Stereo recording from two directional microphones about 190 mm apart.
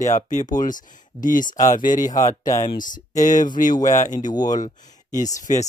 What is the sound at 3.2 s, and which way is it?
Speech, 45° left (ahead or behind).